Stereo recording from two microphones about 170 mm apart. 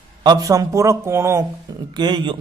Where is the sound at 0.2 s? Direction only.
25° right (ahead or behind).